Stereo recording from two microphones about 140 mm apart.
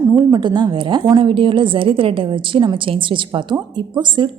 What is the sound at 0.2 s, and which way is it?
A woman's voice, 30° right (ahead or behind).